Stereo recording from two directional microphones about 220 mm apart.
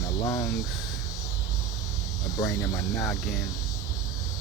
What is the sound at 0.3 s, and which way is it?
Speech, 15° left (ahead or behind).